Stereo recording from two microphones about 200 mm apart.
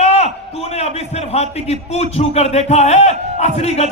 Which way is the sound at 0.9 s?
30° left (ahead or behind).